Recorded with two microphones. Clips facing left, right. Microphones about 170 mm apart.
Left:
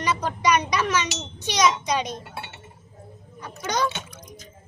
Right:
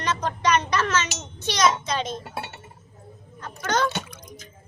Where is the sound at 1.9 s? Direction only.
15° left (ahead or behind).